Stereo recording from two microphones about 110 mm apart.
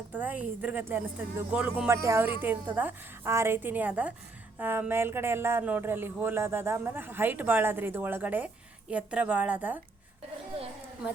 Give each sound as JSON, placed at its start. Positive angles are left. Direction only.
{"t": 0.1, "sound": "speech", "side_deg": -15}
{"t": 1.9, "sound": "speech", "side_deg": -25}